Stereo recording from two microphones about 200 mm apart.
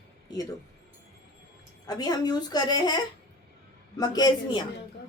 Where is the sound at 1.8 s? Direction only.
20° left (ahead or behind).